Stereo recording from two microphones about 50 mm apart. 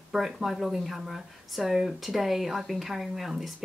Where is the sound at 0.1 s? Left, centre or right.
Centre.